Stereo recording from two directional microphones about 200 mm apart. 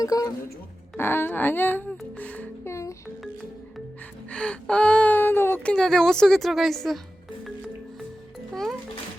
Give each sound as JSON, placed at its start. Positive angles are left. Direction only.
{"t": 0.0, "sound": "music", "side_deg": 20}
{"t": 4.3, "sound": "speech", "side_deg": 5}